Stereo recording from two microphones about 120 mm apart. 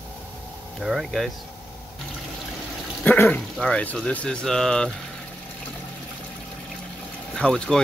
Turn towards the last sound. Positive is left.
turn(degrees=5)  # may be behind; listen again after turning